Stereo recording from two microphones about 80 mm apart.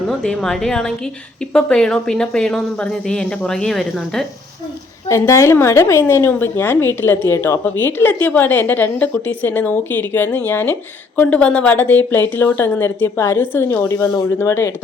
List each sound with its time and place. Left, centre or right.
0.1 s a woman's voice: centre
5.0 s a woman's voice: left
11.2 s a woman's voice: centre; by 14.7 s left